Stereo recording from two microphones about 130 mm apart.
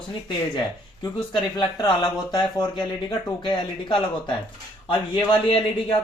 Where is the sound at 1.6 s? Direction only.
35° left (ahead or behind).